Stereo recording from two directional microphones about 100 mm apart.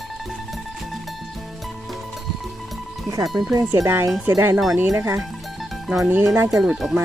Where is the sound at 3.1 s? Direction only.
35° right (ahead or behind).